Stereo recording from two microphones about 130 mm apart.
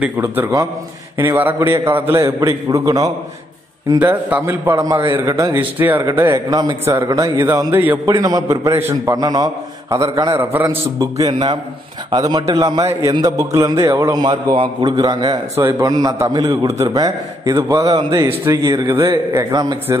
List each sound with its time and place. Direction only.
0.2 s a man's voice: 20° right (ahead or behind)
4.0 s a man's voice: 15° right (ahead or behind)
8.1 s a man's voice: 30° right (ahead or behind)
9.1 s a man's voice: 30° right (ahead or behind)
10.4 s a man's voice: 15° right (ahead or behind)
14.2 s a man's voice: 35° right (ahead or behind)